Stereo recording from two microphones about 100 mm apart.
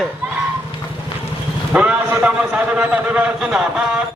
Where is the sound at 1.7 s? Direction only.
10° right (ahead or behind).